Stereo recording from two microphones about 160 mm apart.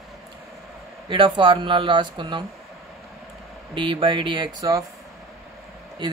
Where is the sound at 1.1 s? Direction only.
30° right (ahead or behind).